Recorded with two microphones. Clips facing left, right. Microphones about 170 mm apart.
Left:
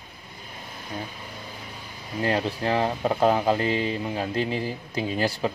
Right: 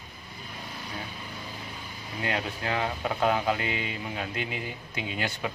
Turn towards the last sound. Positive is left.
turn(degrees=35)  # may be behind; listen again after turning